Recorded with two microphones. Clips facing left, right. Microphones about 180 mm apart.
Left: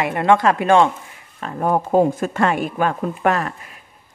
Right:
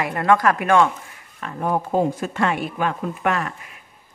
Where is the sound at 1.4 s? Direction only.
40° left (ahead or behind).